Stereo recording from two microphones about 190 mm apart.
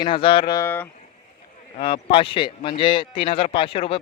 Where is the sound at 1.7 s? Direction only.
30° left (ahead or behind).